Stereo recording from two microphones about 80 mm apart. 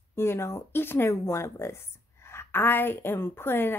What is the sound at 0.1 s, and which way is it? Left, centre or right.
A woman's voice, left.